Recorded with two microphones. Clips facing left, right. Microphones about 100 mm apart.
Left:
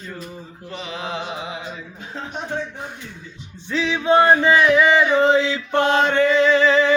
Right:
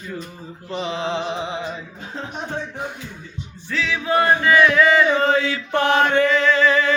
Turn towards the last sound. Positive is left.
turn(degrees=20)  # may be behind; listen again after turning